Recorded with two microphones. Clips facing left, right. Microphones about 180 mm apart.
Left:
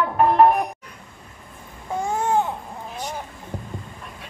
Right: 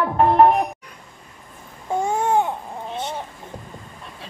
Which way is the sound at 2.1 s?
20° right (ahead or behind).